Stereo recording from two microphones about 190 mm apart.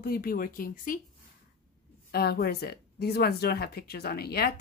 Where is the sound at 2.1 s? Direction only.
55° left (ahead or behind).